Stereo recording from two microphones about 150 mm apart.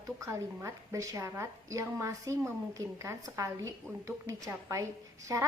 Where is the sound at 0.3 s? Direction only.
20° right (ahead or behind).